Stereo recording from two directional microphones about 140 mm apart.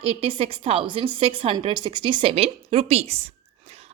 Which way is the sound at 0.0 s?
45° right (ahead or behind).